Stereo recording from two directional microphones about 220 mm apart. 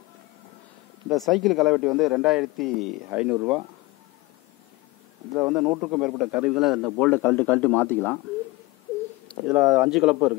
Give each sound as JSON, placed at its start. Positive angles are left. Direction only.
{"t": 1.0, "sound": "a man's voice", "side_deg": 0}
{"t": 5.4, "sound": "a man's voice", "side_deg": -5}
{"t": 9.5, "sound": "a man's voice", "side_deg": -5}